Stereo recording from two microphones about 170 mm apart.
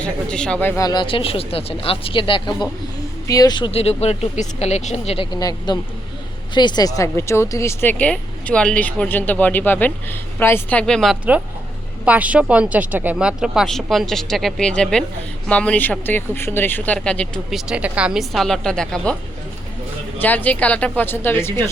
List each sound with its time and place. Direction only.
0.0 s speech: 5° left (ahead or behind)
0.8 s speech: 25° left (ahead or behind); by 17.6 s 5° left (ahead or behind)
17.7 s speech: 5° right (ahead or behind)
20.1 s speech: 10° left (ahead or behind)